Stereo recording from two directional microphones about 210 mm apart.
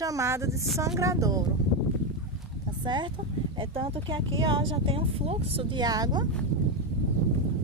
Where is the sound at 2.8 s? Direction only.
20° right (ahead or behind).